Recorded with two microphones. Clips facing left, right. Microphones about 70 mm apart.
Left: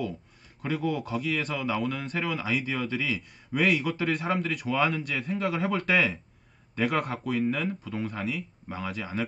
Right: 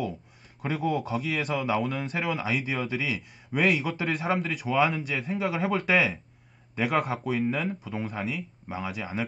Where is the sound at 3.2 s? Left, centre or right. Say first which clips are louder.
Right 1 dB; centre.